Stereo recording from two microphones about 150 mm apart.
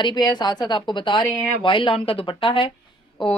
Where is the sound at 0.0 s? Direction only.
30° left (ahead or behind).